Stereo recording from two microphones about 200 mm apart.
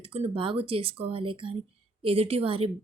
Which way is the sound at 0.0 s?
30° right (ahead or behind).